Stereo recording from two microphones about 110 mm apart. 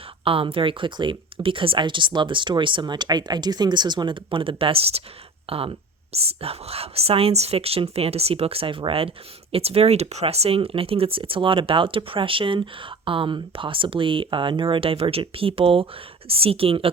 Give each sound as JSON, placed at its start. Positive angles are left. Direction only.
{"t": 0.3, "sound": "speech", "side_deg": -55}